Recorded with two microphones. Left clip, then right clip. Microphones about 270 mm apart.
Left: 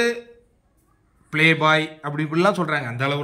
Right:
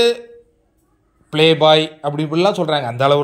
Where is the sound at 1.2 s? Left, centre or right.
Centre.